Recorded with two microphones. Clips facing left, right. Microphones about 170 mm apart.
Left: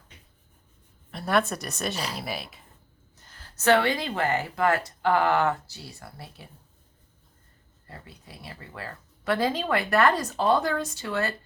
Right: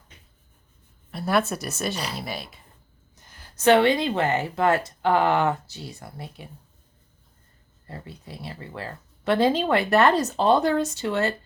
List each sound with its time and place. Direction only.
1.1 s speech: centre (ahead or behind)
3.2 s speech: 15° right (ahead or behind)
7.9 s speech: 25° right (ahead or behind)